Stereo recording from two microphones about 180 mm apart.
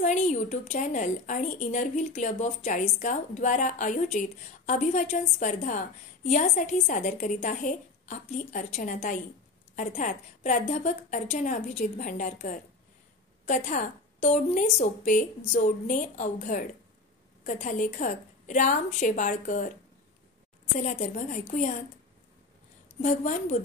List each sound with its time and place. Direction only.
0.0 s a woman's voice: 45° left (ahead or behind)
20.8 s a woman's voice: 45° left (ahead or behind)
23.0 s a woman's voice: 45° left (ahead or behind)